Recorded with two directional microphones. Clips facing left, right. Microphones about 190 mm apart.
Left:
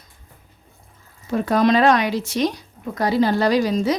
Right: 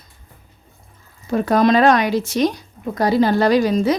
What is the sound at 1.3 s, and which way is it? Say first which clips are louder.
A woman's voice: right 2 dB; 45° right (ahead or behind).